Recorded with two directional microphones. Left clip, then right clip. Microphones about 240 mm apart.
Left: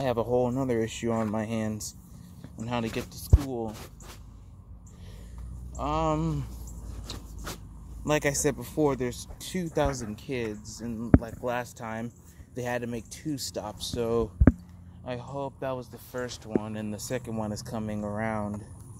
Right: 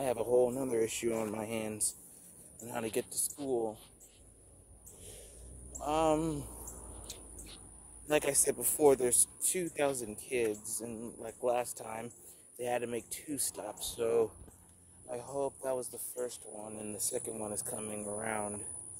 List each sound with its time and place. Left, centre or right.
0.0 s speech: centre
5.9 s speech: centre
8.1 s speech: centre
8.7 s speech: right
9.5 s speech: centre
10.0 s speech: centre
15.1 s speech: centre
15.9 s speech: centre
16.8 s speech: centre